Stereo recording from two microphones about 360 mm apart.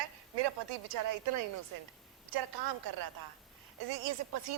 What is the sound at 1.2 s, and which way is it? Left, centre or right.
Speech, right.